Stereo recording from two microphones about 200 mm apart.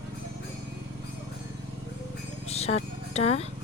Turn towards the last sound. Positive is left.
turn(degrees=30)  # may be behind; listen again after turning